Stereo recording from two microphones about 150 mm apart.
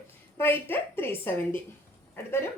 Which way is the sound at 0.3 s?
15° left (ahead or behind).